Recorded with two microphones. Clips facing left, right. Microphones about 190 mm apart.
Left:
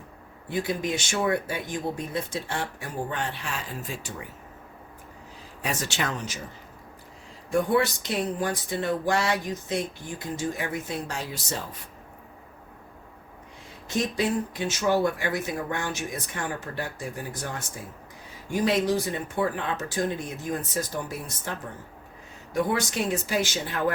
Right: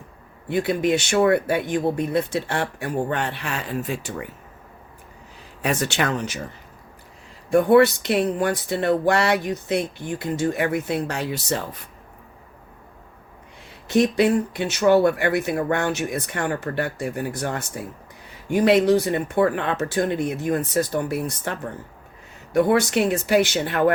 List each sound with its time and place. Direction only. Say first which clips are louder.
0.4 s speech: right 7 dB; 65° right (ahead or behind)
5.6 s speech: right 7 dB; 60° right (ahead or behind)
7.5 s speech: right 8 dB; 65° right (ahead or behind)
13.8 s speech: right 8 dB; 65° right (ahead or behind)